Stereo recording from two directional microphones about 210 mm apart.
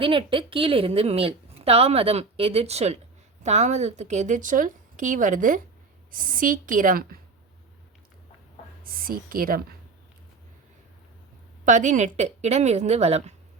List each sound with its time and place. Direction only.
0.0 s a woman's voice: 25° right (ahead or behind); by 7.2 s 40° right (ahead or behind)
8.8 s speech: 45° right (ahead or behind)
11.6 s speech: 35° right (ahead or behind)